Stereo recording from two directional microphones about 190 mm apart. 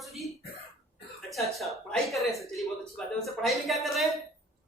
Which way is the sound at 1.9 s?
Centre (ahead or behind).